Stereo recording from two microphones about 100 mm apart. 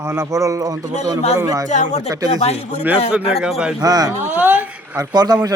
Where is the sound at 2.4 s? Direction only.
90° left.